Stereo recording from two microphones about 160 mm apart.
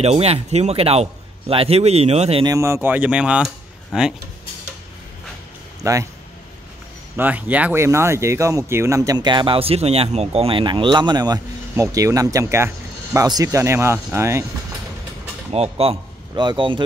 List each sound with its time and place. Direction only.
0.0 s speech: 40° right (ahead or behind)
2.4 s speech: 20° right (ahead or behind)
5.8 s speech: 20° right (ahead or behind)
7.2 s speech: 10° right (ahead or behind)
15.5 s speech: 40° right (ahead or behind)